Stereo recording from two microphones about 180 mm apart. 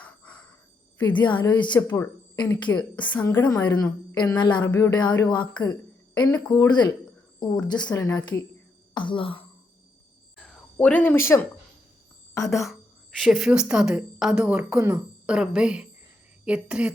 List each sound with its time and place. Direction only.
0.0 s a sound: 5° left (ahead or behind)
0.9 s a woman's voice: 25° left (ahead or behind)
1.9 s a woman's voice: 10° left (ahead or behind)
3.2 s a woman's voice: 20° left (ahead or behind)
10.3 s cricket: 5° left (ahead or behind)
12.6 s speech: centre (ahead or behind)